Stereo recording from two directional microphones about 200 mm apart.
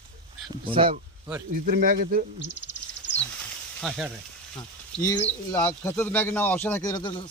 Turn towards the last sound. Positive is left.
turn(degrees=20)  # may be behind; listen again after turning